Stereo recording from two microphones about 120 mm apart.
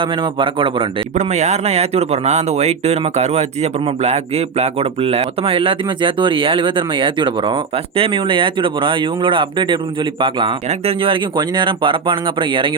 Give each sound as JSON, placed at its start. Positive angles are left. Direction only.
{"t": 0.0, "sound": "speech", "side_deg": -45}
{"t": 1.1, "sound": "speech", "side_deg": -70}